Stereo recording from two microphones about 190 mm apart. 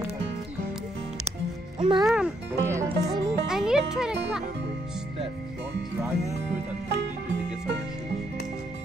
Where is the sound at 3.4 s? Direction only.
5° right (ahead or behind).